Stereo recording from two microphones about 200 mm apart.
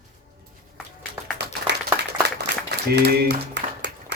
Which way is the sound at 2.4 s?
55° right (ahead or behind).